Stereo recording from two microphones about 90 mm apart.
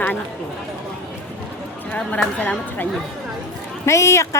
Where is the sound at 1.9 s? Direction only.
15° left (ahead or behind).